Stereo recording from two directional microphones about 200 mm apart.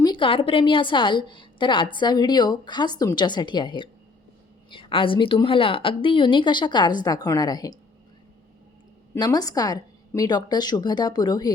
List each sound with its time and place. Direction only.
0.0 s a woman's voice: 25° left (ahead or behind)
9.1 s a woman's voice: 20° left (ahead or behind)